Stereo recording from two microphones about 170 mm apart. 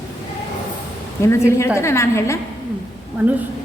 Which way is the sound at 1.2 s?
15° left (ahead or behind).